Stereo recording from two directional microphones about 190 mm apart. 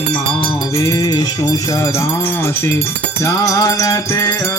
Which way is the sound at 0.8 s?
15° left (ahead or behind).